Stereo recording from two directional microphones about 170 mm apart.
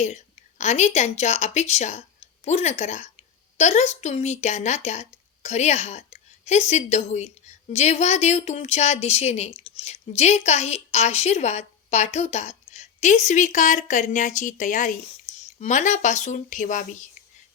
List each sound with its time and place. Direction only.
0.6 s speech: 40° left (ahead or behind)